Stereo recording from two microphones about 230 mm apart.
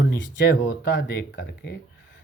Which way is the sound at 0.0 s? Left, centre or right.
Left.